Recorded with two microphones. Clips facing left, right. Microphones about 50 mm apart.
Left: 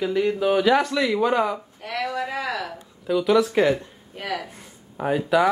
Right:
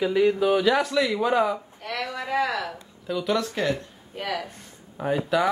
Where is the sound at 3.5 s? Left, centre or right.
Centre.